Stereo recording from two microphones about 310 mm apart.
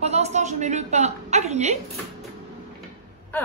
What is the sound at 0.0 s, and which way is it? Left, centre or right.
A woman's voice, right.